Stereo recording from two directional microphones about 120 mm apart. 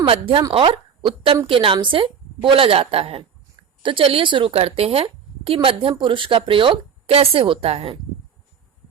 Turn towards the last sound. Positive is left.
turn(degrees=-55)  # may be behind; listen again after turning